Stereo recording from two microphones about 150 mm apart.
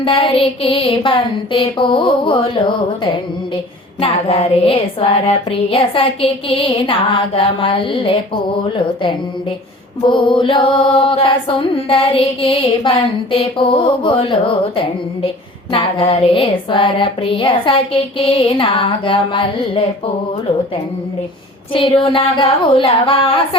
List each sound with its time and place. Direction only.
0.0 s mantra: 35° left (ahead or behind)
15.7 s mantra: 35° left (ahead or behind)
21.7 s mantra: 35° left (ahead or behind)